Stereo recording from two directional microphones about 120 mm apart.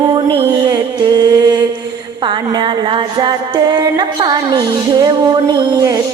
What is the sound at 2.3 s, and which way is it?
Music, 40° right (ahead or behind).